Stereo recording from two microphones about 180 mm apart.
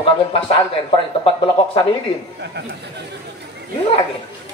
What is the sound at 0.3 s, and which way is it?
Speech, 30° left (ahead or behind).